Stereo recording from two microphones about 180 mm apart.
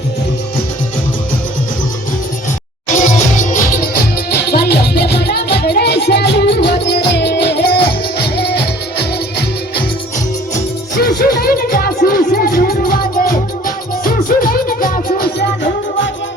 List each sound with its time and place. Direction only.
2.9 s music: 45° left (ahead or behind)
4.4 s music: 65° left (ahead or behind)
11.3 s music: 55° left (ahead or behind)